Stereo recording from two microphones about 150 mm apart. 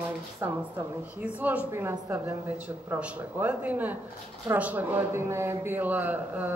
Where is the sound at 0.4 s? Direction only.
15° right (ahead or behind).